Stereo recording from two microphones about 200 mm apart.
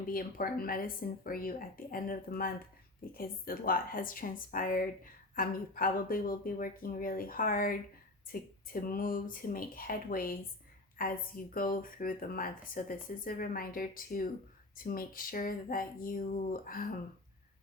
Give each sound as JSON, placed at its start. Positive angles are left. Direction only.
{"t": 0.1, "sound": "speech", "side_deg": 45}